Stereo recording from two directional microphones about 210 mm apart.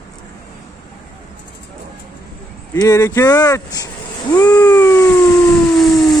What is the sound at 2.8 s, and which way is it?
Speech, 15° left (ahead or behind).